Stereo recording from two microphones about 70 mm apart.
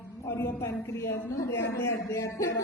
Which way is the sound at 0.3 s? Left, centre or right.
Left.